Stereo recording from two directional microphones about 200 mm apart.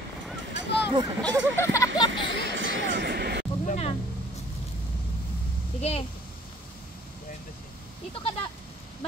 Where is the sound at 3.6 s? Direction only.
30° left (ahead or behind).